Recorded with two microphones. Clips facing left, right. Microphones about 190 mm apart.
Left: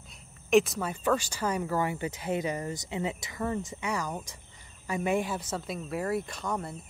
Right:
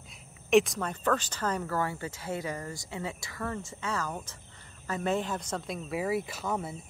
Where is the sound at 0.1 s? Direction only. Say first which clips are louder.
Even; centre (ahead or behind).